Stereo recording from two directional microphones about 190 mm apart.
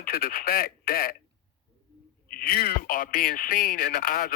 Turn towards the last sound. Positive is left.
turn(degrees=50)  # may be behind; listen again after turning